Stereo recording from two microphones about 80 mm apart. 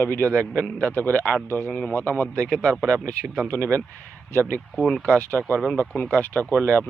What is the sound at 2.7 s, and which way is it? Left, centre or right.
Speech, right.